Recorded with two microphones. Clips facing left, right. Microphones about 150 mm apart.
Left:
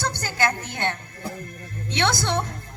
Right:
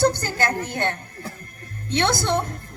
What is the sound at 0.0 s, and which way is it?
A woman's voice, 45° right (ahead or behind).